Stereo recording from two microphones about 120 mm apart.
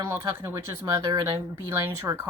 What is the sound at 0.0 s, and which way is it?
Speech, 20° right (ahead or behind).